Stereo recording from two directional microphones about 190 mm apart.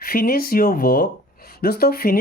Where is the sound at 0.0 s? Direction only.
50° left (ahead or behind).